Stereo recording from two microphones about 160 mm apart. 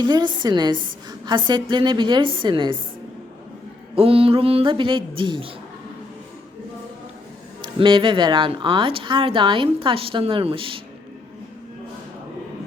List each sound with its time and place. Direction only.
0.0 s a woman's voice: 30° right (ahead or behind)
3.9 s speech: 35° right (ahead or behind)
7.6 s speech: 30° right (ahead or behind)